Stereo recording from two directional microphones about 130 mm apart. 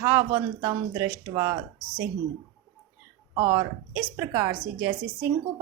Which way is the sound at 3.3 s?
25° right (ahead or behind).